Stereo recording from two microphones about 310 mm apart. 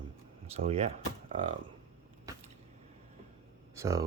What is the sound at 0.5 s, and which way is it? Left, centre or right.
Speech, centre.